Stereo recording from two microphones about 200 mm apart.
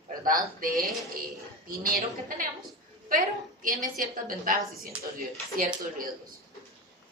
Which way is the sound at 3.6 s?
45° right (ahead or behind).